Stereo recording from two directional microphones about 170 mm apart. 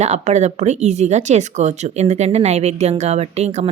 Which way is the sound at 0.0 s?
40° right (ahead or behind).